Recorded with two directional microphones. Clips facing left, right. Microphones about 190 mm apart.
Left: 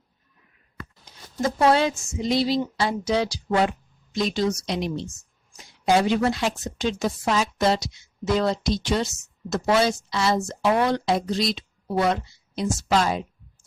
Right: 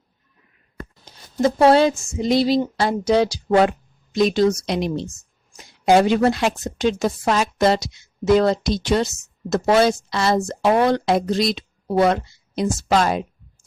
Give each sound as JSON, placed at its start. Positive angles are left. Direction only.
{"t": 1.0, "sound": "speech", "side_deg": -30}
{"t": 9.5, "sound": "speech", "side_deg": -50}